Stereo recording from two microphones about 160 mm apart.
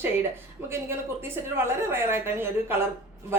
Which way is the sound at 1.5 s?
15° right (ahead or behind).